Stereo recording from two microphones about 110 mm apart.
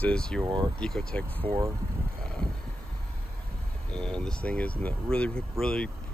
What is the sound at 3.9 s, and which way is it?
Speech, 5° left (ahead or behind).